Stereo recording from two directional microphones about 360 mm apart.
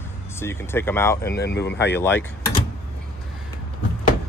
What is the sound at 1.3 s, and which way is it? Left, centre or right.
Speech, left.